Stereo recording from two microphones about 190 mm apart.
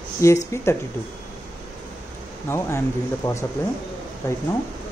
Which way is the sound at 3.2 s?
15° left (ahead or behind).